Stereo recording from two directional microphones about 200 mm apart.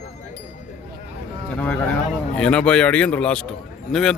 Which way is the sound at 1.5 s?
5° left (ahead or behind).